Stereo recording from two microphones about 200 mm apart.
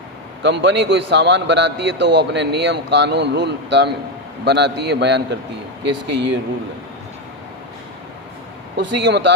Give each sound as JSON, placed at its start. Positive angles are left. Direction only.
{"t": 0.4, "sound": "a man's voice", "side_deg": -60}
{"t": 9.0, "sound": "a man's voice", "side_deg": -65}